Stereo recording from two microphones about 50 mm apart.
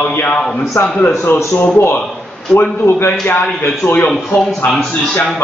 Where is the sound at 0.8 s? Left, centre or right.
Left.